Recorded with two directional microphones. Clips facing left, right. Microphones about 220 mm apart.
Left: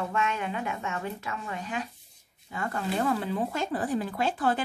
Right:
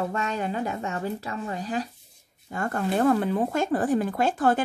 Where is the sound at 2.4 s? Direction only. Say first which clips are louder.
Right 4 dB; 45° right (ahead or behind).